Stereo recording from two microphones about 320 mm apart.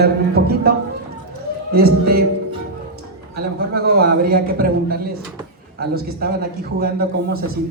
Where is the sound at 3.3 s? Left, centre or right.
Right.